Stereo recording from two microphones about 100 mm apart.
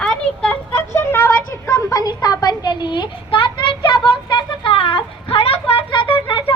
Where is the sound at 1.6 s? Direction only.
40° left (ahead or behind).